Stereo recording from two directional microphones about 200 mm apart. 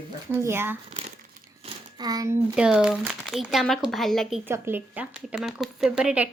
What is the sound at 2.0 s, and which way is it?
Speech, 20° right (ahead or behind).